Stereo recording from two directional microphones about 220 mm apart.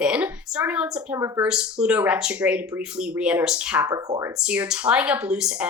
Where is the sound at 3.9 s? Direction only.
15° right (ahead or behind).